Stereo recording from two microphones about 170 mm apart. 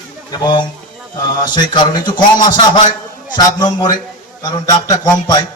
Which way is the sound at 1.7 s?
25° left (ahead or behind).